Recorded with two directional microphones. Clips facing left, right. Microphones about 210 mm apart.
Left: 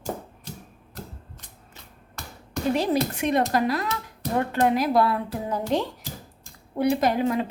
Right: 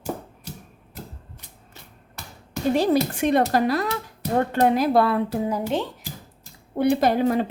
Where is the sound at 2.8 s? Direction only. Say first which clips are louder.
Right 4 dB; 30° right (ahead or behind).